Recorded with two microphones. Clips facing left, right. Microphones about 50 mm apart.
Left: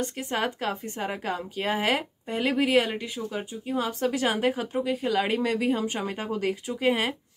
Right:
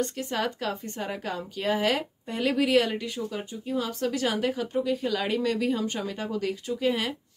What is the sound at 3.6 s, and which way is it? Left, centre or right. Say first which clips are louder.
A woman's voice: left 2 dB; left.